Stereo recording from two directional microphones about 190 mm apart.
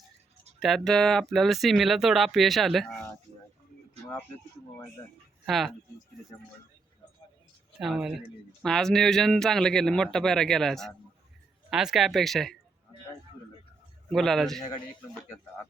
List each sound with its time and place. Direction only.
0.6 s speech: centre (ahead or behind)
5.5 s speech: centre (ahead or behind)
7.8 s speech: centre (ahead or behind)
14.1 s speech: centre (ahead or behind)